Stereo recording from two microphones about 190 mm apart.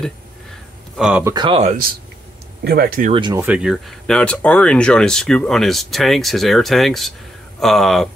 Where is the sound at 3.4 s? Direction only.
5° right (ahead or behind).